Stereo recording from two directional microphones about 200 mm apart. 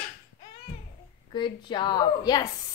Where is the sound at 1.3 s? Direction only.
25° left (ahead or behind).